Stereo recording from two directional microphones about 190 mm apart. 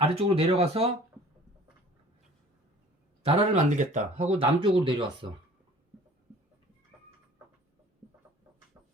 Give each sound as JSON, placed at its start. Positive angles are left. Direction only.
{"t": 0.0, "sound": "speech", "side_deg": -30}
{"t": 3.2, "sound": "speech", "side_deg": -35}